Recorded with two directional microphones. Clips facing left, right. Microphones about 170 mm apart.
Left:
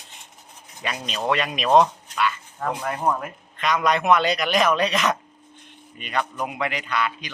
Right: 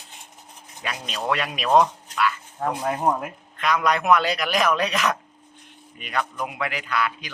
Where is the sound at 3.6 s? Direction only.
Centre (ahead or behind).